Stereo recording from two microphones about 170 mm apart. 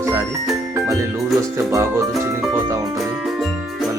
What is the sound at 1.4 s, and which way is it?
Speech, 20° right (ahead or behind).